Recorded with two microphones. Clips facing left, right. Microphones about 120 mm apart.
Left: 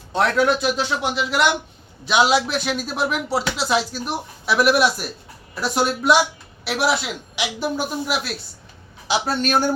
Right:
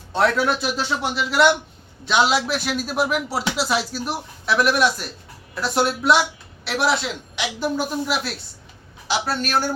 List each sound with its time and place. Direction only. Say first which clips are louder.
0.1 s speech: left 1 dB; centre (ahead or behind)
9.0 s a man's voice: left 2 dB; 15° left (ahead or behind)